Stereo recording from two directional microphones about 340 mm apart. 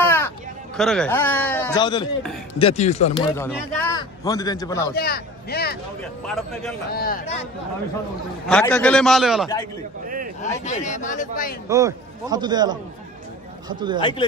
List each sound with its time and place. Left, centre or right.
0.0 s a sound: centre
0.7 s a man's voice: centre
3.3 s a man's voice: centre
4.9 s speech: left
6.2 s speech: centre
6.9 s a man's voice: left
8.5 s speech: centre
10.0 s speech: right
10.6 s a man's voice: left
11.7 s a man's voice: centre